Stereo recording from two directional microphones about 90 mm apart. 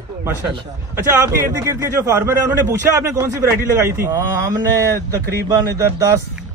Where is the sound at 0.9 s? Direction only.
30° right (ahead or behind).